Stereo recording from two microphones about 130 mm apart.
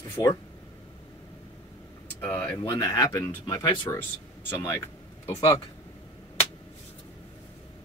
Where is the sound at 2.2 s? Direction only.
15° left (ahead or behind).